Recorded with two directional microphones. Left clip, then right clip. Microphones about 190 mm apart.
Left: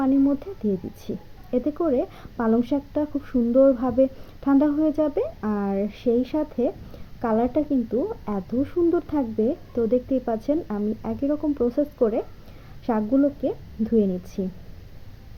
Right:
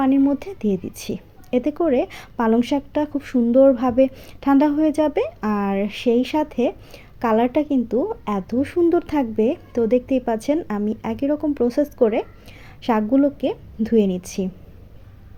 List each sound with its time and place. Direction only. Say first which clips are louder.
0.0 s a woman's voice: right 3 dB; 30° right (ahead or behind)